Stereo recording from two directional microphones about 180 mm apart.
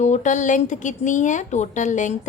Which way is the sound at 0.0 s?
40° left (ahead or behind).